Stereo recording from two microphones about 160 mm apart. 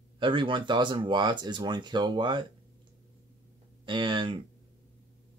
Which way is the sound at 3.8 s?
30° right (ahead or behind).